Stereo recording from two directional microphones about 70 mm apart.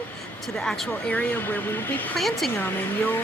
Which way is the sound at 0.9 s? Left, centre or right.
Left.